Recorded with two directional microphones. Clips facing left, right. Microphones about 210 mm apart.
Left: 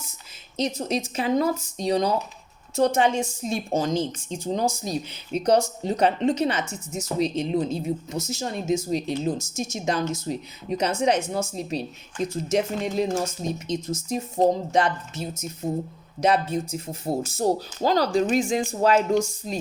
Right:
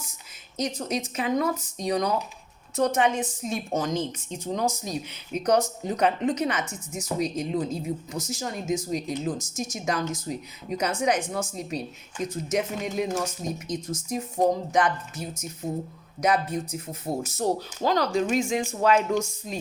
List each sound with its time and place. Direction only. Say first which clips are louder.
0.5 s a woman's voice: left 3 dB; 25° left (ahead or behind)